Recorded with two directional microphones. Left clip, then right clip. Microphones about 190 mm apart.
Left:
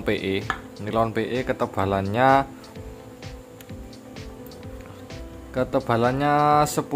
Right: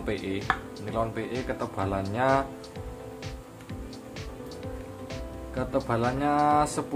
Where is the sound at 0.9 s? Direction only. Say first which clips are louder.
Left 7 dB; 55° left (ahead or behind).